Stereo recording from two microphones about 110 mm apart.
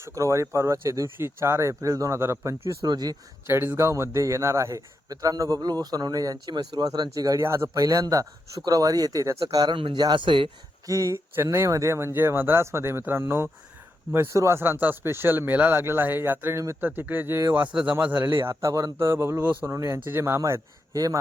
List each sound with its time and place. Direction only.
0.0 s speech: 30° right (ahead or behind)
2.8 s a man's voice: 40° right (ahead or behind)
3.5 s a man's voice: 20° right (ahead or behind)
9.7 s speech: 45° right (ahead or behind)
10.8 s speech: 30° right (ahead or behind)